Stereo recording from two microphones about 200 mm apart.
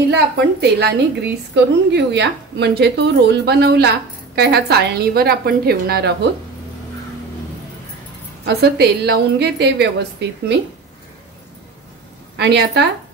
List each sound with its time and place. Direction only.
0.1 s a woman's voice: 55° right (ahead or behind)
8.5 s a woman's voice: 55° right (ahead or behind)
12.4 s a woman's voice: 55° right (ahead or behind)